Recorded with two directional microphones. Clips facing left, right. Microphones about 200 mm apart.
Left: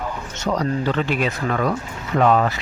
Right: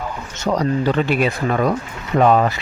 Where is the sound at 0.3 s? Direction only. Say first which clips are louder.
Right 3 dB; 10° right (ahead or behind).